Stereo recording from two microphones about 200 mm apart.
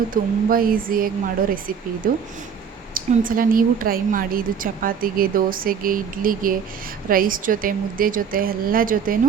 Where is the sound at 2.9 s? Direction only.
45° right (ahead or behind).